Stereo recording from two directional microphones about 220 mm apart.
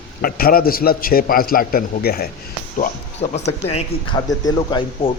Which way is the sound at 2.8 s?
30° left (ahead or behind).